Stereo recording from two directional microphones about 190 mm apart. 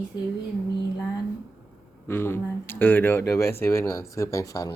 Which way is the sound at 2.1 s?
10° left (ahead or behind).